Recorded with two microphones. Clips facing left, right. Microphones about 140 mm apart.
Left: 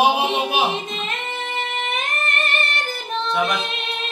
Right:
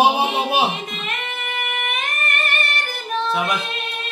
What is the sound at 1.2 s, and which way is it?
Music, 25° left (ahead or behind).